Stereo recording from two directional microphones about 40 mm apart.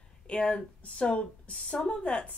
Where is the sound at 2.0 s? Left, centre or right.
Left.